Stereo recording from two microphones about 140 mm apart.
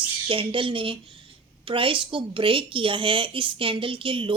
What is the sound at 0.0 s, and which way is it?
A woman's voice, 40° right (ahead or behind).